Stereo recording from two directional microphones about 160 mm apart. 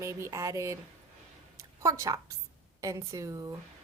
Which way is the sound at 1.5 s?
20° right (ahead or behind).